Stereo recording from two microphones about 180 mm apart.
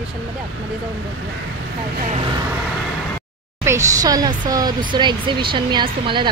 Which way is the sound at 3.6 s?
20° right (ahead or behind).